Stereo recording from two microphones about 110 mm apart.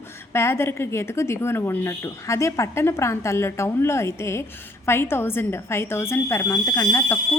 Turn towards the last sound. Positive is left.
turn(degrees=25)  # may be behind; listen again after turning